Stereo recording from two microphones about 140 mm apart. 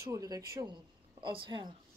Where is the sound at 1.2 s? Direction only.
35° right (ahead or behind).